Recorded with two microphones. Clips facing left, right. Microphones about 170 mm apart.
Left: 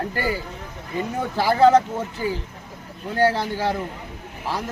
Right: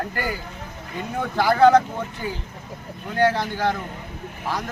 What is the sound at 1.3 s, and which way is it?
A man's voice, 30° left (ahead or behind).